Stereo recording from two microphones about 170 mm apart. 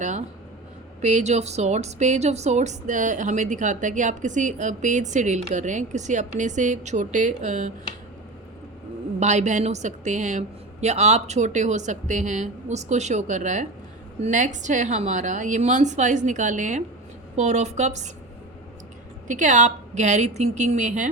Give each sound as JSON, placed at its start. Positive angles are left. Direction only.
{"t": 1.0, "sound": "a woman's voice", "side_deg": -40}
{"t": 9.2, "sound": "a woman's voice", "side_deg": -45}
{"t": 19.3, "sound": "a woman's voice", "side_deg": -45}